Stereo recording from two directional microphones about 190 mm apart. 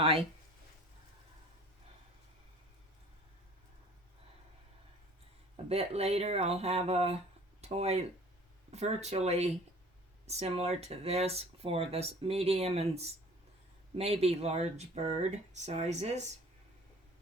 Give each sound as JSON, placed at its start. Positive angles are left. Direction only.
{"t": 0.0, "sound": "speech", "side_deg": -30}
{"t": 5.6, "sound": "speech", "side_deg": -35}